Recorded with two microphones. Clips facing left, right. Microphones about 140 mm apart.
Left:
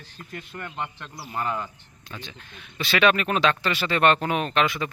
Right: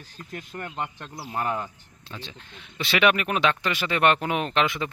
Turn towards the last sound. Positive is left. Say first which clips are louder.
# left 1 dB
turn(degrees=-20)  # may be behind; listen again after turning